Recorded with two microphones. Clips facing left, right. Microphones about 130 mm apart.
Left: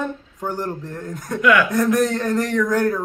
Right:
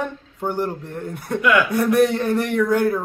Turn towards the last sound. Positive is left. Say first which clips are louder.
# right 1 dB
turn(degrees=-10)  # may be behind; listen again after turning